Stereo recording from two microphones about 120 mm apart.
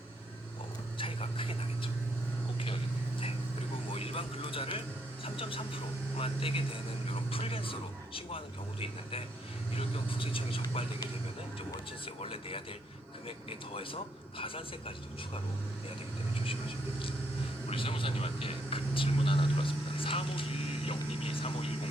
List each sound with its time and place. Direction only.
0.9 s a sound: 50° left (ahead or behind)
3.9 s a sound: 55° left (ahead or behind)
7.1 s vehicle: 50° left (ahead or behind)
9.7 s a man's voice: 50° left (ahead or behind)
12.0 s a man's voice: 50° left (ahead or behind)
17.7 s vehicle: 50° left (ahead or behind)